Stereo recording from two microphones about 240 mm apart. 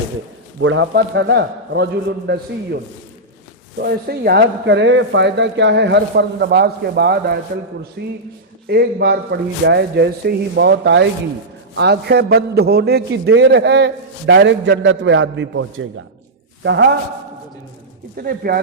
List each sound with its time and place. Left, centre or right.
0.6 s a man's voice: right
3.8 s a man's voice: right
18.2 s speech: right